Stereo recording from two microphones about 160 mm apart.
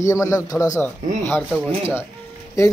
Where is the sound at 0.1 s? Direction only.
20° left (ahead or behind).